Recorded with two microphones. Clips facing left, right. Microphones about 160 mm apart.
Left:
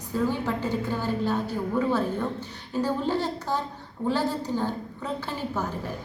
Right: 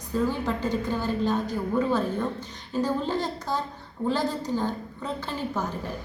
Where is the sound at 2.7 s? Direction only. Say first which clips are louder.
Even; 10° left (ahead or behind).